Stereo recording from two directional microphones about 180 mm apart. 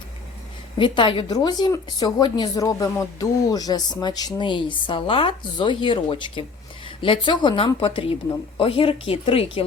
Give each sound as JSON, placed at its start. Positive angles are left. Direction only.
{"t": 0.8, "sound": "a woman's voice", "side_deg": 25}